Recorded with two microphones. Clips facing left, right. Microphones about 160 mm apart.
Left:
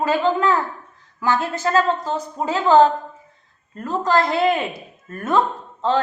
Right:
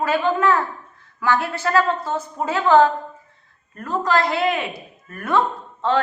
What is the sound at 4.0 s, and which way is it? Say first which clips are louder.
Speech: left 2 dB; 25° left (ahead or behind).